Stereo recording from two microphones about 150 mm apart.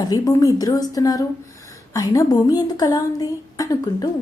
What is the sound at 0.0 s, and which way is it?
A woman's voice, 25° left (ahead or behind).